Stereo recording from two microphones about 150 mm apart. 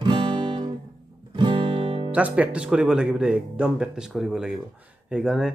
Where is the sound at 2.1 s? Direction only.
10° right (ahead or behind).